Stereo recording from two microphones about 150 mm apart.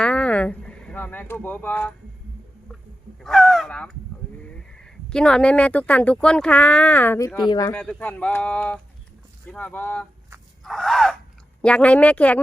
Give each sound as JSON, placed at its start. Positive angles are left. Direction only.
{"t": 0.0, "sound": "a sound", "side_deg": 10}
{"t": 3.2, "sound": "speech", "side_deg": 5}
{"t": 7.3, "sound": "speech", "side_deg": 30}
{"t": 7.7, "sound": "speech", "side_deg": 10}
{"t": 10.6, "sound": "a sound", "side_deg": 0}
{"t": 11.6, "sound": "speech", "side_deg": 10}